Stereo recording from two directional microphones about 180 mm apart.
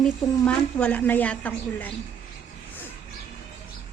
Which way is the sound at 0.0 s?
5° left (ahead or behind).